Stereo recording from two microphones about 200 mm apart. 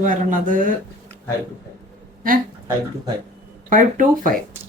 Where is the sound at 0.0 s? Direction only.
40° right (ahead or behind).